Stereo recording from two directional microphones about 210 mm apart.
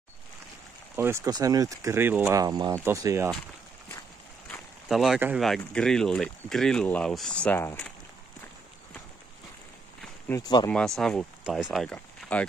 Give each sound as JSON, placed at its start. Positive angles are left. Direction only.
{"t": 0.9, "sound": "speech", "side_deg": -10}
{"t": 4.5, "sound": "speech", "side_deg": 0}
{"t": 10.0, "sound": "speech", "side_deg": 10}
{"t": 10.7, "sound": "speech", "side_deg": 5}